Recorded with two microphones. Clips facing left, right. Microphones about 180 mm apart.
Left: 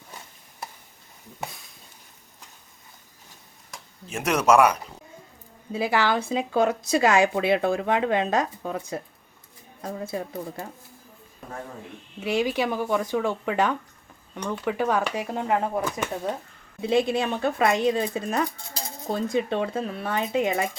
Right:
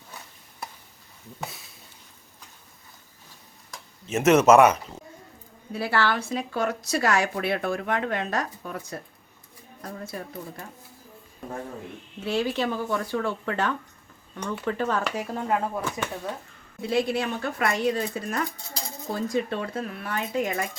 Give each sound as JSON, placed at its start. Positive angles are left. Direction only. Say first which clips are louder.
{"t": 4.0, "sound": "speech", "louder": "right 5 dB", "side_deg": -5}
{"t": 5.7, "sound": "speech", "louder": "left 2 dB", "side_deg": 15}
{"t": 9.8, "sound": "speech", "louder": "left 5 dB", "side_deg": 20}
{"t": 12.2, "sound": "speech", "louder": "left 2 dB", "side_deg": 15}